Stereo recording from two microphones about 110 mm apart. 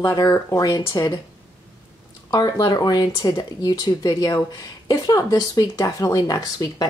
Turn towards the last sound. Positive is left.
turn(degrees=35)  # may be behind; listen again after turning